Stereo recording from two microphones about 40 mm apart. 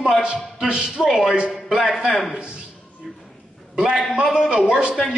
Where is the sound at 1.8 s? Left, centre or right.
Centre.